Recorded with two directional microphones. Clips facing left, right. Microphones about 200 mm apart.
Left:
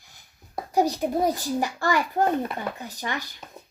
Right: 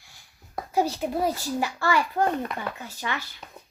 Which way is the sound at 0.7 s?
15° left (ahead or behind).